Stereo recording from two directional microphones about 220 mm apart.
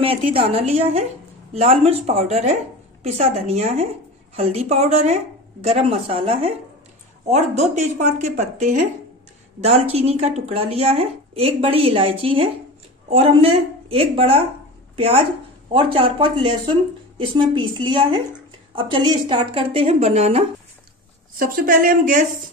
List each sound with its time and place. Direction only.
0.3 s a woman's voice: 25° right (ahead or behind)
21.4 s speech: 40° right (ahead or behind)